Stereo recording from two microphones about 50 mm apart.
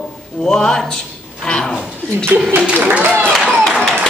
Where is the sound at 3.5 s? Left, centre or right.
Centre.